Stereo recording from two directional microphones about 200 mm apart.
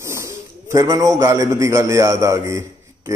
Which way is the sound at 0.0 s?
15° right (ahead or behind).